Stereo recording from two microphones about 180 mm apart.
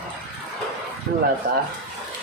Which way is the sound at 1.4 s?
50° right (ahead or behind).